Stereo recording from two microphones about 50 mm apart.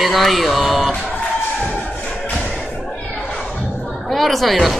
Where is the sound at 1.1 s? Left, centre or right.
Left.